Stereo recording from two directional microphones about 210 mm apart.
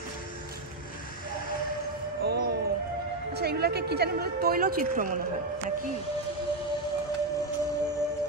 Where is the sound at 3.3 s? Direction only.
50° right (ahead or behind).